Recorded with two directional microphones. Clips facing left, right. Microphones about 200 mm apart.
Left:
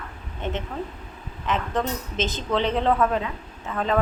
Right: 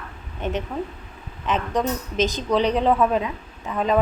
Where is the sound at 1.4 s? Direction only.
15° right (ahead or behind).